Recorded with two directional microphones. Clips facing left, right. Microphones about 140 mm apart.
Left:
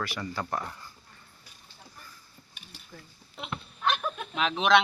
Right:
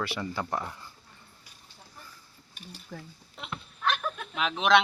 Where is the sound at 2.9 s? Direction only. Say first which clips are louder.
Right 7 dB; 45° right (ahead or behind).